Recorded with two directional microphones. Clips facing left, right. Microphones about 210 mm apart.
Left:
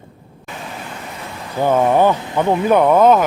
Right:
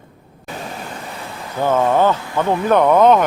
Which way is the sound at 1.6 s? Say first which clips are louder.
Left 2 dB; 15° left (ahead or behind).